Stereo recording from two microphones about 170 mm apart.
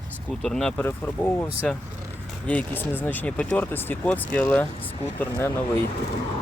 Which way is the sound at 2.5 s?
10° left (ahead or behind).